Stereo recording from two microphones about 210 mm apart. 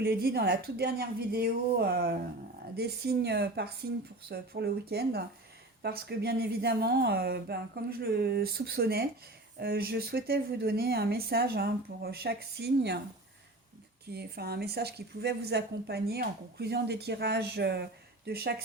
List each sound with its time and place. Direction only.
0.0 s a woman's voice: 50° right (ahead or behind)
14.1 s a woman's voice: 50° right (ahead or behind)